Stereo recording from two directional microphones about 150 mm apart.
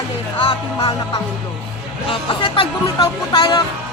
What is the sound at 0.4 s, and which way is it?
Speech, 40° left (ahead or behind).